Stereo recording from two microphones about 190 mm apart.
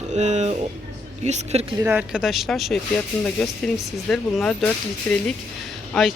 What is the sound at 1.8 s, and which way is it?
Speech, 10° right (ahead or behind).